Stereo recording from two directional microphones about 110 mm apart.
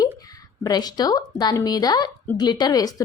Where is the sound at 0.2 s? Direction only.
35° left (ahead or behind).